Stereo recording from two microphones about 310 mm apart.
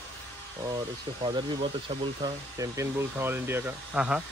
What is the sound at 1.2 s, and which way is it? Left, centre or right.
Speech, centre.